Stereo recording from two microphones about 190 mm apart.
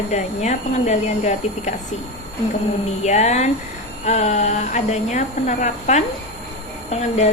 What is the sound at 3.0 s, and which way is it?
A woman's voice, 35° left (ahead or behind).